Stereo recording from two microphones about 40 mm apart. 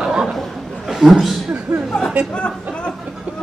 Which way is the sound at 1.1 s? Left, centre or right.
Centre.